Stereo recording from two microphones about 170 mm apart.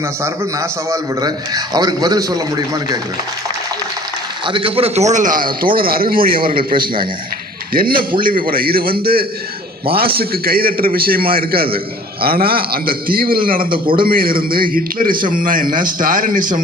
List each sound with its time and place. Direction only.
0.2 s a man's voice: 15° right (ahead or behind)
4.4 s a man's voice: 30° right (ahead or behind); by 16.6 s 50° right (ahead or behind)